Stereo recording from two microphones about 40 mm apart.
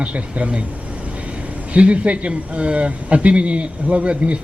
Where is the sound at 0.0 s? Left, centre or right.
Right.